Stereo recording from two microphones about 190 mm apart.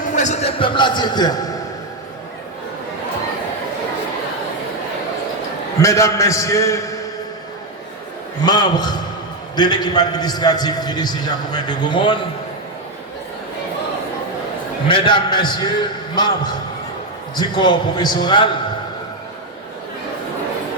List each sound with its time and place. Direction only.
0.0 s a man's voice: 40° left (ahead or behind); by 1.5 s 20° left (ahead or behind)
5.8 s a man's voice: 15° left (ahead or behind)
8.4 s a man's voice: 20° left (ahead or behind)
14.8 s a man's voice: 25° left (ahead or behind)
17.3 s a man's voice: 25° left (ahead or behind)